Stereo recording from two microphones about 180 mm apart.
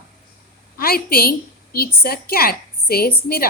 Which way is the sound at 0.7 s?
55° left (ahead or behind).